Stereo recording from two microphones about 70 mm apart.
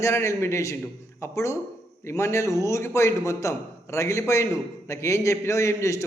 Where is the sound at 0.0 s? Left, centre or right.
Left.